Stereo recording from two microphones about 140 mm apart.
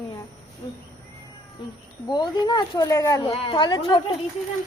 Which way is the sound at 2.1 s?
30° left (ahead or behind).